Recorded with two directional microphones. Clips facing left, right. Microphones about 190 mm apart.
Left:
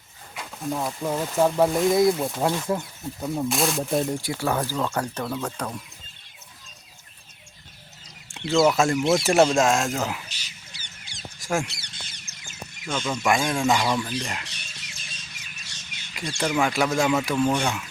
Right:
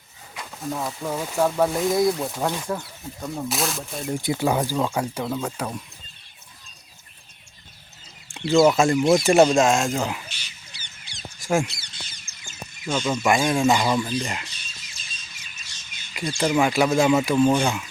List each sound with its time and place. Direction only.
0.3 s speech: centre (ahead or behind)
4.2 s speech: 20° right (ahead or behind)
8.4 s speech: centre (ahead or behind)
10.2 s a sound: 40° left (ahead or behind)
11.3 s mouse: centre (ahead or behind)
11.7 s squawk: 65° left (ahead or behind)
12.8 s speech: 5° right (ahead or behind)
14.4 s bird: 70° left (ahead or behind)
16.1 s speech: 5° right (ahead or behind)